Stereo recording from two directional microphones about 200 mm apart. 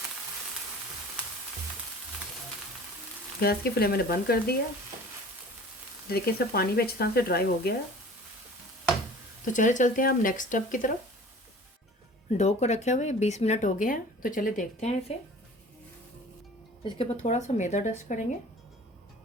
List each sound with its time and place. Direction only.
3.4 s speech: 50° left (ahead or behind)
6.1 s speech: 50° left (ahead or behind)
9.4 s speech: 40° left (ahead or behind)
12.4 s speech: 35° left (ahead or behind)
17.0 s speech: 35° left (ahead or behind)